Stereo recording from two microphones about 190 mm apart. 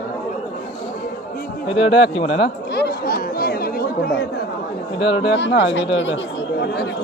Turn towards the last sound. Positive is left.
turn(degrees=75)  # may be behind; listen again after turning